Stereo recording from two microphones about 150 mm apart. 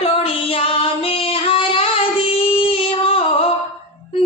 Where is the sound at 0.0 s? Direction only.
40° left (ahead or behind).